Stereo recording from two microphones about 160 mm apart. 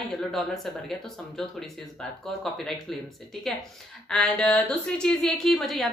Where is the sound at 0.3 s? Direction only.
Centre (ahead or behind).